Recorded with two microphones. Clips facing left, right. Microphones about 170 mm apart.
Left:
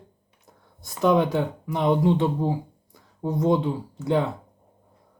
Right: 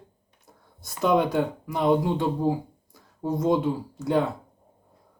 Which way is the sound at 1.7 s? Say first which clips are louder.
Left 2 dB; centre (ahead or behind).